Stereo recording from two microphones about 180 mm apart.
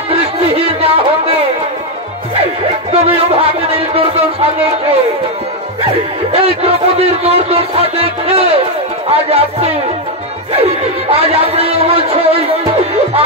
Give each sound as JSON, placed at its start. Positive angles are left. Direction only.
{"t": 0.1, "sound": "a sound", "side_deg": -30}
{"t": 2.9, "sound": "music", "side_deg": -35}
{"t": 6.3, "sound": "speech", "side_deg": -35}